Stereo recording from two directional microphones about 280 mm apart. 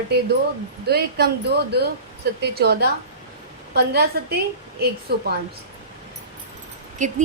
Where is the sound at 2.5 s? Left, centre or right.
Right.